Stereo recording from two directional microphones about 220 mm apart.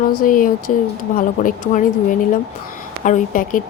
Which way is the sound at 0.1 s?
40° left (ahead or behind).